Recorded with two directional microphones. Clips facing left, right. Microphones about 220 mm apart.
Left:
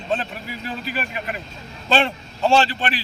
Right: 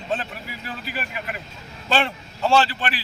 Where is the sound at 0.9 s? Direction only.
25° left (ahead or behind).